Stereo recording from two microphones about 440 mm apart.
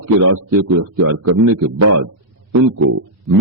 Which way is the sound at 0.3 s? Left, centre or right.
Right.